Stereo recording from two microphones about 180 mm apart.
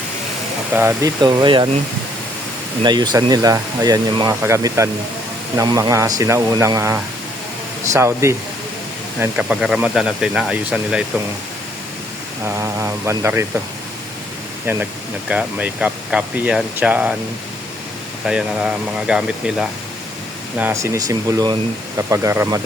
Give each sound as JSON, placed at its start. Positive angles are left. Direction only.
{"t": 0.7, "sound": "speech", "side_deg": -15}
{"t": 2.8, "sound": "speech", "side_deg": -25}
{"t": 12.5, "sound": "speech", "side_deg": -15}
{"t": 15.3, "sound": "speech", "side_deg": -10}
{"t": 18.3, "sound": "speech", "side_deg": -5}